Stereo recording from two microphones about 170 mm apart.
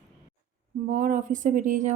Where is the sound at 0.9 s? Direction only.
50° right (ahead or behind).